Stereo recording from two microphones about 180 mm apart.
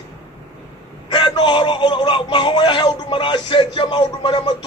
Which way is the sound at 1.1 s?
25° left (ahead or behind).